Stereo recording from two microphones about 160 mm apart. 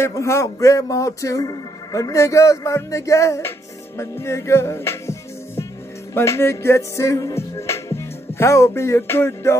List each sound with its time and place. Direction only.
0.0 s speech: 15° left (ahead or behind)
6.1 s music: 15° left (ahead or behind)